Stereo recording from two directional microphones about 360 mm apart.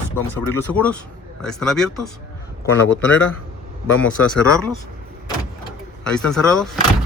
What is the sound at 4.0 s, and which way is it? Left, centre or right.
Speech, centre.